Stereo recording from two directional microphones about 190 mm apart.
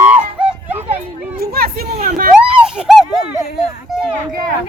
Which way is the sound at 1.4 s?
55° right (ahead or behind).